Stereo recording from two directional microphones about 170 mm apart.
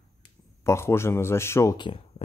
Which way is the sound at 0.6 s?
15° left (ahead or behind).